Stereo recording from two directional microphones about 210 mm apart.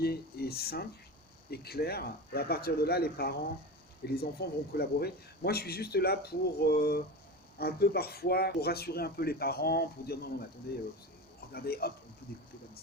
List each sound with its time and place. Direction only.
0.0 s speech: 50° left (ahead or behind)